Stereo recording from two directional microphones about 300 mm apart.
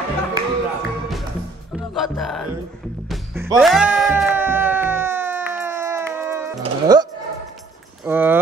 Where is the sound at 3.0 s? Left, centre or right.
Centre.